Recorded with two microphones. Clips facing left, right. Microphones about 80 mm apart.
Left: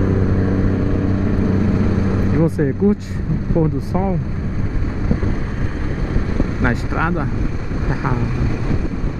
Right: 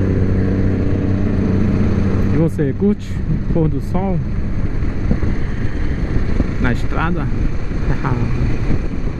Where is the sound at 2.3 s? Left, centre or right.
Centre.